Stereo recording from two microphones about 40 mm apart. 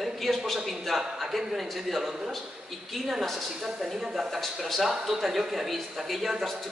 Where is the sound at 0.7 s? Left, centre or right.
Centre.